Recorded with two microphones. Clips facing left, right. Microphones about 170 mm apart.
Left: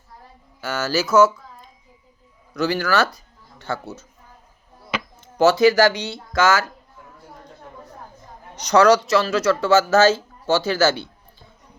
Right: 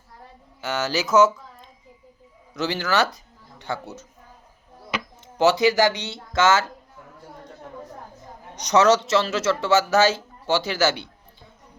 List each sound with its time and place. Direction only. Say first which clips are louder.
0.6 s speech: left 2 dB; 20° right (ahead or behind)
2.6 s speech: left 3 dB; 20° right (ahead or behind)
5.2 s speech: left 4 dB; 20° right (ahead or behind)
8.5 s speech: left 3 dB; 20° right (ahead or behind)